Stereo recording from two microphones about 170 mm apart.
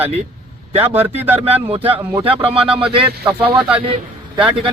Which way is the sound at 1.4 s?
35° right (ahead or behind).